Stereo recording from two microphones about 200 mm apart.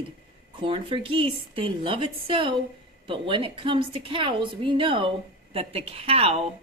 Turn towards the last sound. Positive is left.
turn(degrees=-30)  # may be behind; listen again after turning